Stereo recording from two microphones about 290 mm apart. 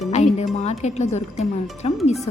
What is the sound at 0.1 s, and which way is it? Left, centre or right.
Music, left.